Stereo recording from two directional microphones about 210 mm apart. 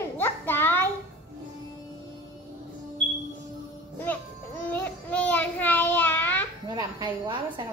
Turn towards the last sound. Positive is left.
turn(degrees=-20)  # may be behind; listen again after turning